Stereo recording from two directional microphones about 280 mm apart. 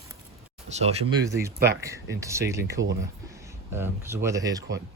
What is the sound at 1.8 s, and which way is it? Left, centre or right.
Speech, centre.